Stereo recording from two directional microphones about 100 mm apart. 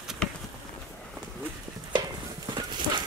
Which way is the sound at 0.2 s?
5° left (ahead or behind).